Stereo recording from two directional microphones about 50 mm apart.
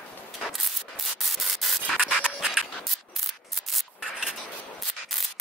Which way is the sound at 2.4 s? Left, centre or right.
Centre.